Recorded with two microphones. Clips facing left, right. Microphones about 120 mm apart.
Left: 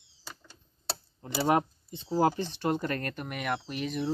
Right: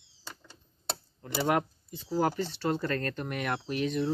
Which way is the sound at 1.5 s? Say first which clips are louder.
Left 3 dB; 20° left (ahead or behind).